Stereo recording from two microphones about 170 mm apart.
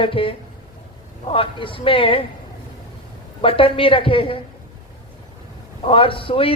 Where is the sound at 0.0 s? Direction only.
30° left (ahead or behind).